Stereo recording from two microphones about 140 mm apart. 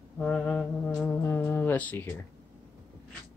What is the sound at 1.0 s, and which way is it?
Speech, 20° left (ahead or behind).